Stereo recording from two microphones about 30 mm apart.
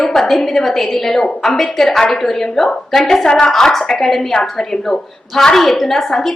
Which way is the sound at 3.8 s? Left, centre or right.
Centre.